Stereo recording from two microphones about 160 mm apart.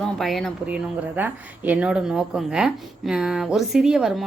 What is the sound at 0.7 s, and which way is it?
Speech, 10° right (ahead or behind).